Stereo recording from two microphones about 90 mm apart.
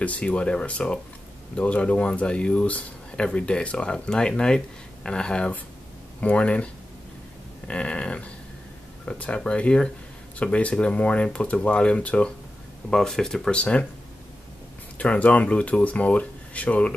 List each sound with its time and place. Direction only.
0.0 s speech: 15° left (ahead or behind)
15.0 s speech: 15° left (ahead or behind)